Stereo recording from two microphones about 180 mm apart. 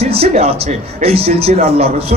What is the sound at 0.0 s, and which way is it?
A man's voice, 35° right (ahead or behind).